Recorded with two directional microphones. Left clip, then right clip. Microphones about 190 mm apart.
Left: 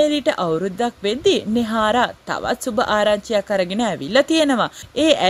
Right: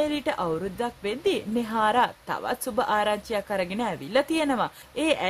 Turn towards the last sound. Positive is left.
turn(degrees=25)  # may be behind; listen again after turning